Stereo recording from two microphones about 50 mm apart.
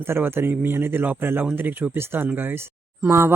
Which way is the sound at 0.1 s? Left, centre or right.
Right.